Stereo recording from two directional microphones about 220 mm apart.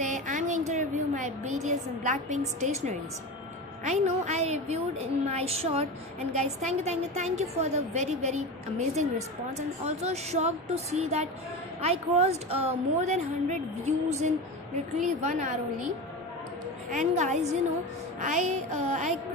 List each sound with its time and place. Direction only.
0.0 s a woman's voice: 35° right (ahead or behind)
16.9 s a woman's voice: 30° right (ahead or behind)